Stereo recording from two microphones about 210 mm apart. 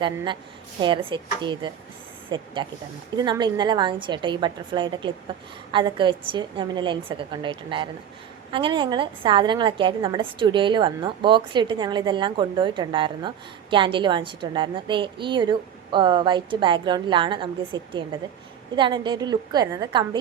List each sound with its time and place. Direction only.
0.8 s a woman's voice: 20° right (ahead or behind)